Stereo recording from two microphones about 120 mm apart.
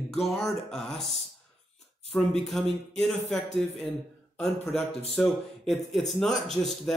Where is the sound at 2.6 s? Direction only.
Centre (ahead or behind).